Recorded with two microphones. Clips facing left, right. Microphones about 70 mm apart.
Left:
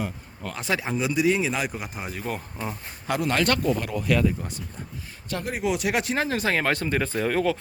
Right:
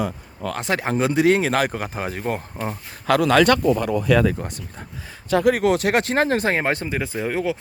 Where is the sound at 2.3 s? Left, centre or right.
Right.